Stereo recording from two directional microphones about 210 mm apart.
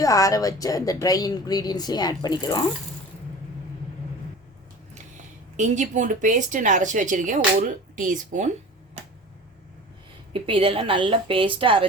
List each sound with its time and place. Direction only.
0.0 s a woman's voice: 15° left (ahead or behind)
5.5 s speech: 35° right (ahead or behind)
10.3 s a woman's voice: 25° right (ahead or behind)